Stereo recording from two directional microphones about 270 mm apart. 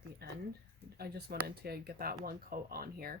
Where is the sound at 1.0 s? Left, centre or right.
Right.